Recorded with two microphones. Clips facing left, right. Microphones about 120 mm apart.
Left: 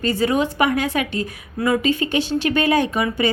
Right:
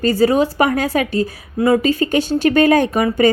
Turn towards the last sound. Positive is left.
turn(degrees=-45)  # may be behind; listen again after turning